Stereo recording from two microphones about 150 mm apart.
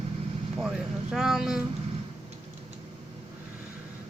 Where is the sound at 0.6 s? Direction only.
5° right (ahead or behind).